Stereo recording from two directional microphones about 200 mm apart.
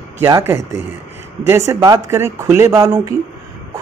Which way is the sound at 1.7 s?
15° right (ahead or behind).